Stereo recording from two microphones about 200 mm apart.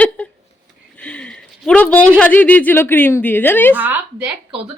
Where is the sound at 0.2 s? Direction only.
5° left (ahead or behind).